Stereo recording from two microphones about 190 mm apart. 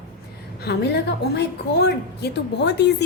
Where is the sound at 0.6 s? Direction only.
60° left (ahead or behind).